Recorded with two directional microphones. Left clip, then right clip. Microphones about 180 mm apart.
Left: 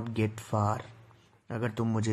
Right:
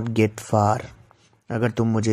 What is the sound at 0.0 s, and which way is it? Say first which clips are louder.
Speech: right 11 dB; 30° right (ahead or behind).